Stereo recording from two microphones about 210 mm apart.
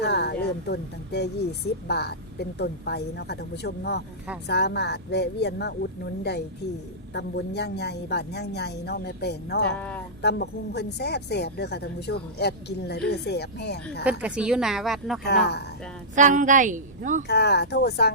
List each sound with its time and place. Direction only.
0.0 s a woman's voice: 50° left (ahead or behind)
9.7 s speech: 5° left (ahead or behind)
10.2 s a woman's voice: 50° left (ahead or behind)
14.0 s a woman's voice: 5° right (ahead or behind)
15.2 s a woman's voice: 50° left (ahead or behind)
16.1 s a woman's voice: 35° right (ahead or behind)
17.2 s a woman's voice: 50° left (ahead or behind)